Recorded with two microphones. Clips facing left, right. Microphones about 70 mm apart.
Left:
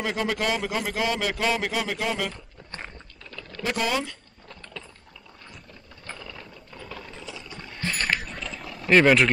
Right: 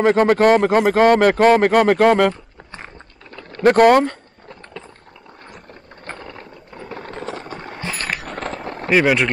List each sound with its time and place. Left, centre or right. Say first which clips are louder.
0.0 s speech: right 13 dB; right
3.3 s vehicle: right 4 dB; right
3.6 s speech: right 15 dB; right
6.0 s a sound: right 6 dB; right
7.0 s a sound: right 10 dB; right
8.9 s speech: right 1 dB; centre